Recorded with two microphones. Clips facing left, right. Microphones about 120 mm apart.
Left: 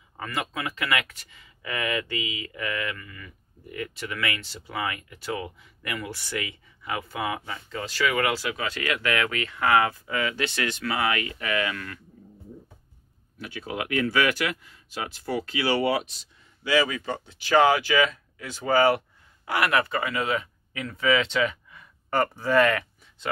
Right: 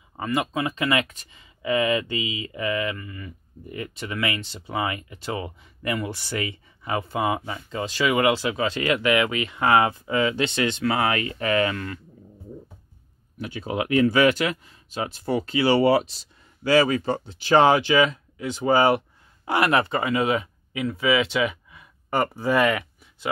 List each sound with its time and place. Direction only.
0.2 s speech: 20° right (ahead or behind)
13.4 s speech: 25° right (ahead or behind)